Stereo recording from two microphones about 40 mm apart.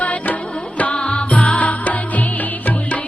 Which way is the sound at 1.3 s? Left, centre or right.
Left.